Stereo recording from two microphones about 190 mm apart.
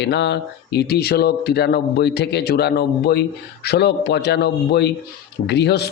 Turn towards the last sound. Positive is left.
turn(degrees=60)  # may be behind; listen again after turning